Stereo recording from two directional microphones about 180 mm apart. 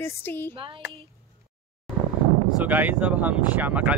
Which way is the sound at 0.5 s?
30° right (ahead or behind).